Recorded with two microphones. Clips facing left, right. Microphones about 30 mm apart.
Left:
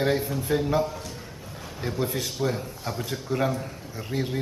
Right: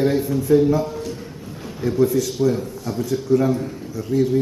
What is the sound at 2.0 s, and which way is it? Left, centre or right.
Speech, left.